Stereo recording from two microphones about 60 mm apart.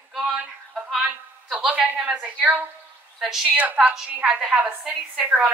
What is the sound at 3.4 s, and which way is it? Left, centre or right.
Speech, right.